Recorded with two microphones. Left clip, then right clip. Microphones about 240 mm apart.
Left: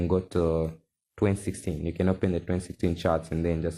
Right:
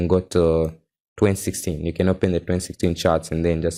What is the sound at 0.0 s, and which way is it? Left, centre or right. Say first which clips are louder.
Speech: right 8 dB; right.